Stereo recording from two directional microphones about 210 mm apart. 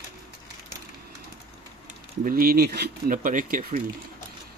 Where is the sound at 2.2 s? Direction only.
45° right (ahead or behind).